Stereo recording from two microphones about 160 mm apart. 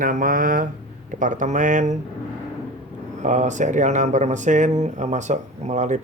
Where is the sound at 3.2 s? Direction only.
50° right (ahead or behind).